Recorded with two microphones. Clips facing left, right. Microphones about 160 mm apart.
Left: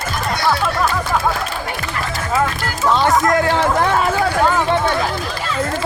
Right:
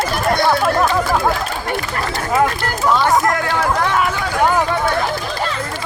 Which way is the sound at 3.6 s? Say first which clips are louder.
Left 1 dB; 30° left (ahead or behind).